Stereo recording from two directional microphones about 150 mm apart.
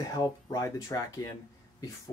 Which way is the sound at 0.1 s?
25° left (ahead or behind).